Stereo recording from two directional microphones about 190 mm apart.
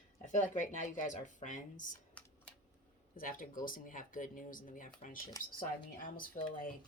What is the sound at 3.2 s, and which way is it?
Speech, 45° left (ahead or behind).